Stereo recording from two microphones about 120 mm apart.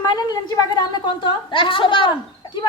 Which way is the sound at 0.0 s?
35° left (ahead or behind).